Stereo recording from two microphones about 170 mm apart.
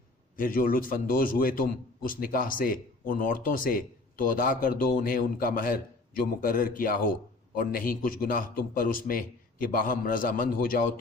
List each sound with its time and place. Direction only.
0.3 s a man's voice: 55° left (ahead or behind)